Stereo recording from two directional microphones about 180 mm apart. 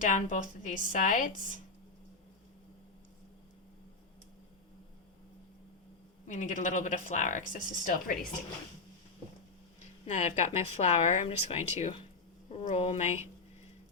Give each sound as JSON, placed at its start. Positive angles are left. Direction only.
{"t": 0.0, "sound": "speech", "side_deg": 45}
{"t": 6.2, "sound": "speech", "side_deg": 45}
{"t": 10.1, "sound": "speech", "side_deg": 35}